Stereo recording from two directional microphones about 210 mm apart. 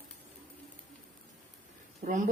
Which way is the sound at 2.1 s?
40° right (ahead or behind).